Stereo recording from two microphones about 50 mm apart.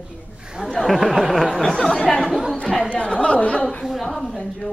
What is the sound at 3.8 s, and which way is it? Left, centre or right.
Speech, centre.